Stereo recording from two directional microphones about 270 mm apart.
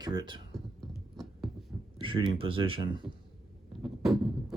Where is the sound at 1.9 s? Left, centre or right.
Centre.